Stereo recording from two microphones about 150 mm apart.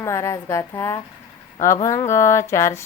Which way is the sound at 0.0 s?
20° left (ahead or behind).